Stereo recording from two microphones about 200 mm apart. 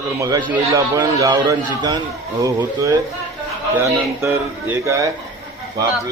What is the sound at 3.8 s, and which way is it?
A man's voice, 10° right (ahead or behind).